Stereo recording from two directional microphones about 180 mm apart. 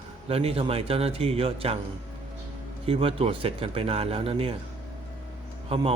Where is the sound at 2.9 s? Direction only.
30° right (ahead or behind).